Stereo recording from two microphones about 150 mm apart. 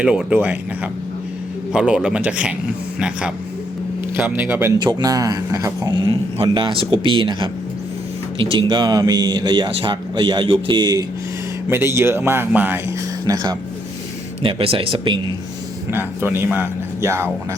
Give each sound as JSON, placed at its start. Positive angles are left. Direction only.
{"t": 0.0, "sound": "speech", "side_deg": -5}
{"t": 1.7, "sound": "speech", "side_deg": -5}
{"t": 4.8, "sound": "speech", "side_deg": -25}
{"t": 11.7, "sound": "speech", "side_deg": -15}
{"t": 13.2, "sound": "speech", "side_deg": -25}
{"t": 14.4, "sound": "speech", "side_deg": -40}
{"t": 15.9, "sound": "speech", "side_deg": -15}